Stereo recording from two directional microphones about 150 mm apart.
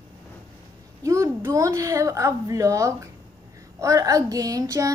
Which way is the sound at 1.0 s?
20° right (ahead or behind).